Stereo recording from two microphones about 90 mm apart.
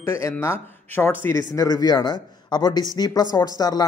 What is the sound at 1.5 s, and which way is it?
A woman's voice, 45° left (ahead or behind).